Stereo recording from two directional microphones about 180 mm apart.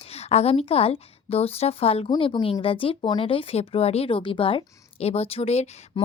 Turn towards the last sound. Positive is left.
turn(degrees=35)  # may be behind; listen again after turning